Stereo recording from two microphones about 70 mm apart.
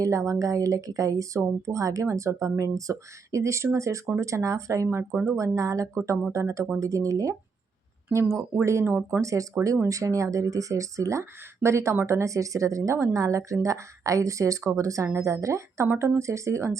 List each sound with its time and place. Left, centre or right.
0.0 s speech: right
8.1 s speech: right
9.2 s speech: right